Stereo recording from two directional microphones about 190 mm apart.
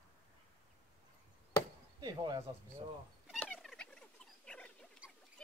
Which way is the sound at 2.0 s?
20° right (ahead or behind).